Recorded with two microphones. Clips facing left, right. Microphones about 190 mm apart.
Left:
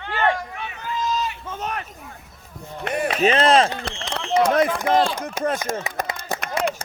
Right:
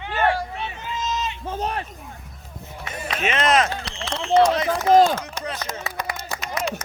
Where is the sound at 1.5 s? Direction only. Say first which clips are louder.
Right 3 dB; 35° right (ahead or behind).